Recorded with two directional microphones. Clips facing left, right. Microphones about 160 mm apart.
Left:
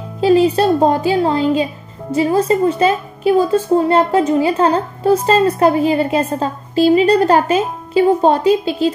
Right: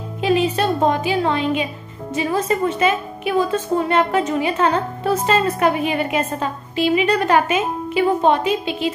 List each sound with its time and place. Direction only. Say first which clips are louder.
0.2 s speech: left 6 dB; 35° left (ahead or behind)